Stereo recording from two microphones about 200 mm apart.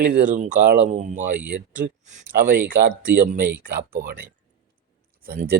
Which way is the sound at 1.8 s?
50° right (ahead or behind).